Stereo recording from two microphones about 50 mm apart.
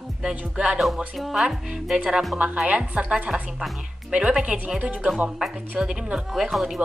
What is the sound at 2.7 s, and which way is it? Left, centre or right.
Speech, right.